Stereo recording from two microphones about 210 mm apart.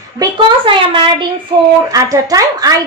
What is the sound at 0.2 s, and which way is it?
A woman's voice, 25° right (ahead or behind).